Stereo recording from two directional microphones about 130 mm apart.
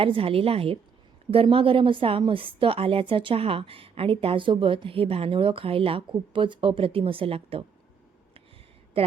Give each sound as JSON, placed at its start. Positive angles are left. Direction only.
{"t": 0.0, "sound": "a woman's voice", "side_deg": -45}